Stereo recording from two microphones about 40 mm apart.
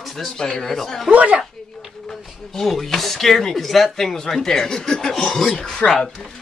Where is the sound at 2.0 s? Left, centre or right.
Centre.